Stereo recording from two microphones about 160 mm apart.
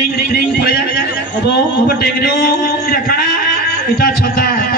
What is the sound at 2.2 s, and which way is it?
A man's voice, 70° left (ahead or behind).